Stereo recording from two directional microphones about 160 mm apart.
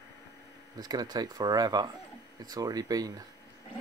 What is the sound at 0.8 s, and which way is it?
Speech, 25° right (ahead or behind).